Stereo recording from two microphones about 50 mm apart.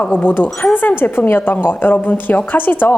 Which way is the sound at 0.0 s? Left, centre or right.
Left.